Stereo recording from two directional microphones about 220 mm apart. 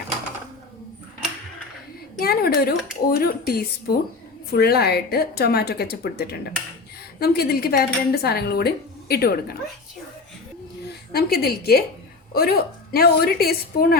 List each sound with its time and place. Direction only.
2.1 s speech: 45° left (ahead or behind)
11.1 s speech: 45° left (ahead or behind)